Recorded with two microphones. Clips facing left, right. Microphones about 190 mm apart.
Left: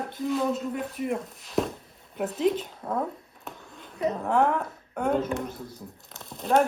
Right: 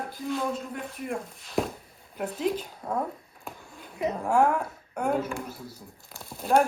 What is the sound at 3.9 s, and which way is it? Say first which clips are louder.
A woman's voice: even; 10° right (ahead or behind).